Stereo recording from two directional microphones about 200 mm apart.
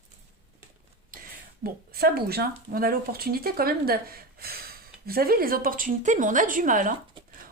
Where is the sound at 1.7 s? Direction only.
50° right (ahead or behind).